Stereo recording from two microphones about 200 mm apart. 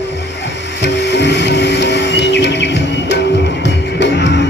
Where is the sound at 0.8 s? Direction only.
60° left (ahead or behind).